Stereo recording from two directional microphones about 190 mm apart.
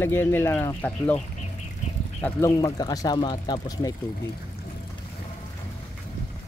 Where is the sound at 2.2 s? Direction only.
15° left (ahead or behind).